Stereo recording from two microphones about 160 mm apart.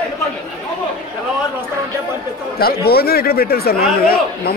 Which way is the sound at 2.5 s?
75° left (ahead or behind).